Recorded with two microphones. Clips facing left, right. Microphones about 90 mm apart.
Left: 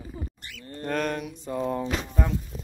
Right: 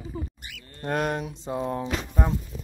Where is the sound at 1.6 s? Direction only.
5° right (ahead or behind).